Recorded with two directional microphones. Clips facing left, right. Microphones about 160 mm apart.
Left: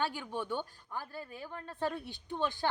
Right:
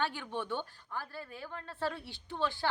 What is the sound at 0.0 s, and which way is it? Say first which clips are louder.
A woman's voice: even; 10° left (ahead or behind).